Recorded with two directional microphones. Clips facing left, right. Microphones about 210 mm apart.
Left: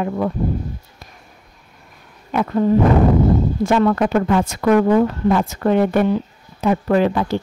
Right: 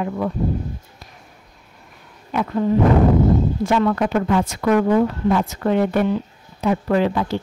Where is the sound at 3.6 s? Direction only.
45° left (ahead or behind).